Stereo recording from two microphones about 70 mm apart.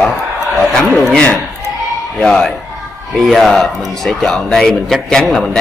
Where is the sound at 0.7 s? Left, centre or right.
Centre.